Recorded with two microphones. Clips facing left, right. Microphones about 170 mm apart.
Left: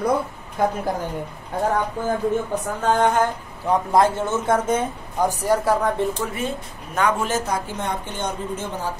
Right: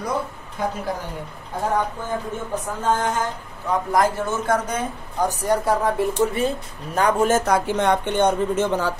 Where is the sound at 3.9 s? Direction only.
25° left (ahead or behind).